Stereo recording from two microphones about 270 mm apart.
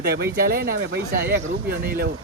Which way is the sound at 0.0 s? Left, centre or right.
Right.